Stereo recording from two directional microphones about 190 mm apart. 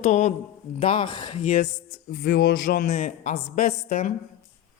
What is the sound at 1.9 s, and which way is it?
A man's voice, 55° left (ahead or behind).